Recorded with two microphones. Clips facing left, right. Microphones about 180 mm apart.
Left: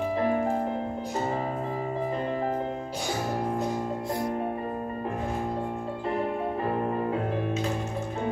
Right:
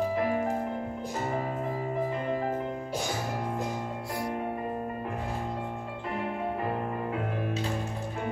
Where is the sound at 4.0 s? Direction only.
20° left (ahead or behind).